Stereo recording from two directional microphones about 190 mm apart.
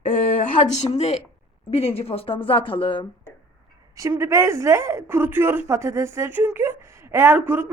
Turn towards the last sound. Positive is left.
turn(degrees=-10)  # may be behind; listen again after turning